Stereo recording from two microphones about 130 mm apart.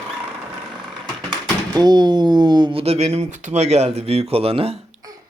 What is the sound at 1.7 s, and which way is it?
Speech, 30° right (ahead or behind).